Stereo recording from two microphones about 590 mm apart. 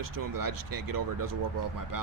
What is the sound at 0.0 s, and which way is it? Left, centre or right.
Speech, right.